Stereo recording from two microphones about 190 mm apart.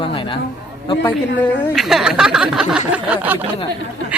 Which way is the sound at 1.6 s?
Centre (ahead or behind).